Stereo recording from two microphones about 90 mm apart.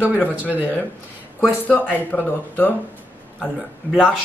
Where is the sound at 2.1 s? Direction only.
20° left (ahead or behind).